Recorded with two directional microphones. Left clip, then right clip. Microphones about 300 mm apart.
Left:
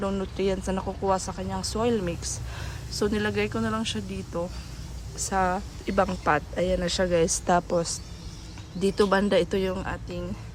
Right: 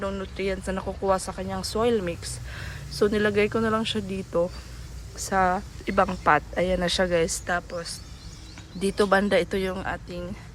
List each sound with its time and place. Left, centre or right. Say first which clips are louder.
0.0 s speech: left 2 dB; centre